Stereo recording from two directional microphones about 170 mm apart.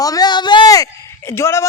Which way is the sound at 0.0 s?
20° left (ahead or behind).